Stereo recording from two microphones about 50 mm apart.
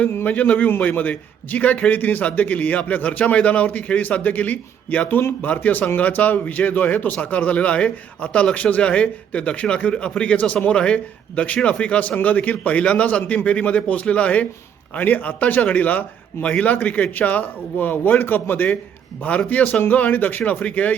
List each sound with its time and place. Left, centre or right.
0.3 s a man's voice: left